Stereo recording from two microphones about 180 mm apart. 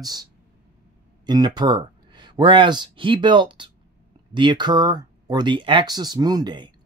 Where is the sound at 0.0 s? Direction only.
20° right (ahead or behind).